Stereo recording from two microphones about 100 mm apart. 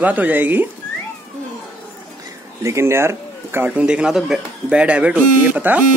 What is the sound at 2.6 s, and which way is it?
Speech, 30° right (ahead or behind).